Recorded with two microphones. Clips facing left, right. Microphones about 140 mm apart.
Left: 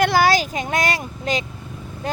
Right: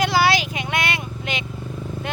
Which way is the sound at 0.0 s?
50° left (ahead or behind).